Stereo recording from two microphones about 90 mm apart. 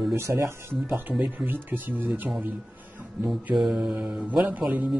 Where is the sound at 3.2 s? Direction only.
5° right (ahead or behind).